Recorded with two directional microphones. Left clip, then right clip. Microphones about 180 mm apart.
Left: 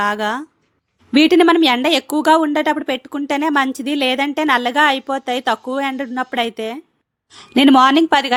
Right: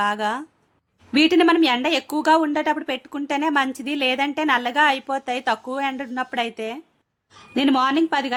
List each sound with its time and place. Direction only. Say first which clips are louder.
0.0 s a woman's voice: left 4 dB; 25° left (ahead or behind)
7.3 s a woman's voice: left 8 dB; 40° left (ahead or behind)